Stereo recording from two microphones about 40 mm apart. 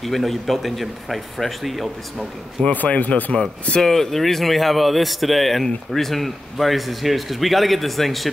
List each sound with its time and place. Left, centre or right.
0.0 s a man's voice: centre
2.7 s speech: left
3.8 s a man's voice: centre